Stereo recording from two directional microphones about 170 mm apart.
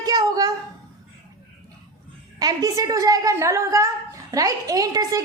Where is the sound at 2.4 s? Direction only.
20° right (ahead or behind).